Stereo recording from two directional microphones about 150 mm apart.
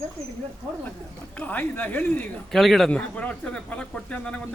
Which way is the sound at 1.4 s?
10° left (ahead or behind).